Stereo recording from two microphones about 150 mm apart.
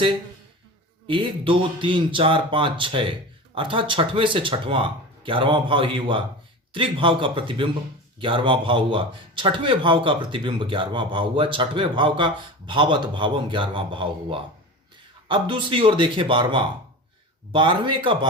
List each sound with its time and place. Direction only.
1.0 s a man's voice: 35° right (ahead or behind)